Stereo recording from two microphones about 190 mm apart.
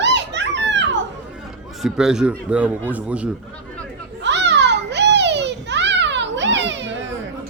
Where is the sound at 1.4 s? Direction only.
5° right (ahead or behind).